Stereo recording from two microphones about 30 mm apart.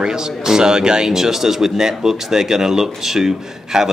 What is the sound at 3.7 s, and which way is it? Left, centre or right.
Speech, right.